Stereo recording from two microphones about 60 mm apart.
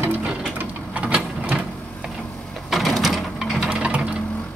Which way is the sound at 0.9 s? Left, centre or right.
Right.